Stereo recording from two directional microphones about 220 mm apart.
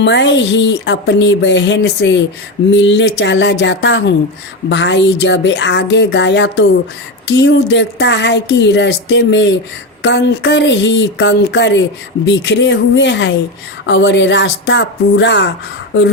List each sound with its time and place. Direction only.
0.0 s speech: 55° left (ahead or behind)